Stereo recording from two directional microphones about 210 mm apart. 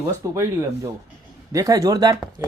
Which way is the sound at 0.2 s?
15° right (ahead or behind).